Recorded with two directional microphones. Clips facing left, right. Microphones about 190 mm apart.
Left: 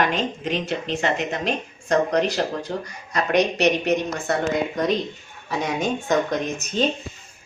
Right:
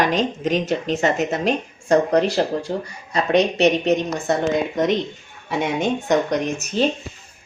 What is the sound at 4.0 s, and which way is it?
A woman's voice, 20° right (ahead or behind).